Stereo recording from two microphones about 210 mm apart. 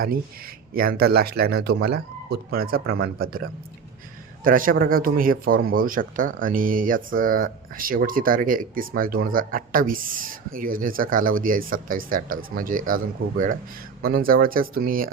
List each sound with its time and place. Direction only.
0.0 s speech: 45° right (ahead or behind)
4.4 s speech: 40° right (ahead or behind)